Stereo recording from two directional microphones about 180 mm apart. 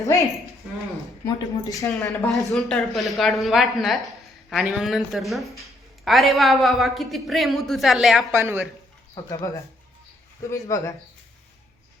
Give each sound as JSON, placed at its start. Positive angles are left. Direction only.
{"t": 0.0, "sound": "a woman's voice", "side_deg": 20}
{"t": 2.2, "sound": "speech", "side_deg": 0}
{"t": 8.3, "sound": "speech", "side_deg": -15}
{"t": 9.1, "sound": "speech", "side_deg": 20}
{"t": 10.5, "sound": "a woman's voice", "side_deg": 15}